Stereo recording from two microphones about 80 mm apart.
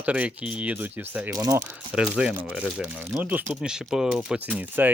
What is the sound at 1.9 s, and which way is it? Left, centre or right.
Speech, centre.